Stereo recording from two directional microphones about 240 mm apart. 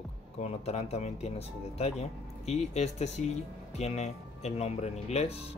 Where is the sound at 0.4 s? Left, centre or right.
Left.